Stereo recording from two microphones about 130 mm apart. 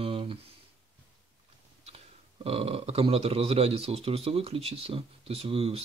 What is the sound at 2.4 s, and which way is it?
Speech, 50° right (ahead or behind).